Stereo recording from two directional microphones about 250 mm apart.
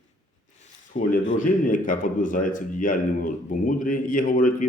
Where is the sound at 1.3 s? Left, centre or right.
Left.